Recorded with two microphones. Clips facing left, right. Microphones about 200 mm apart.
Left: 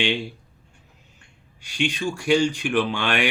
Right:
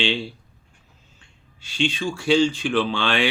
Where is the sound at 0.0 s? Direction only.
15° left (ahead or behind).